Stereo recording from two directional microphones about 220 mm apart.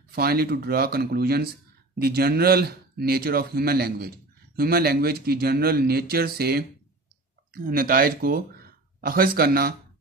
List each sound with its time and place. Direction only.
0.1 s speech: 45° right (ahead or behind)